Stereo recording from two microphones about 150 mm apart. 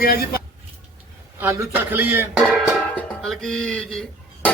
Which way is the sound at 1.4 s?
10° right (ahead or behind).